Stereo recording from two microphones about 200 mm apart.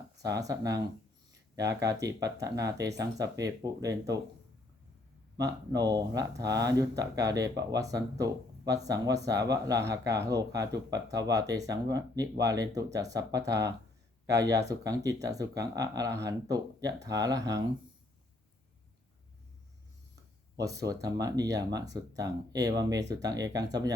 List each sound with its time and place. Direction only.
0.2 s speech: 15° right (ahead or behind)
5.4 s speech: 20° right (ahead or behind)
20.7 s speech: 15° right (ahead or behind)